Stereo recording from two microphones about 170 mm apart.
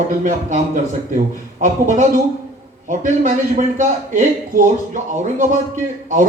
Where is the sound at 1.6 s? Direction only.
45° right (ahead or behind).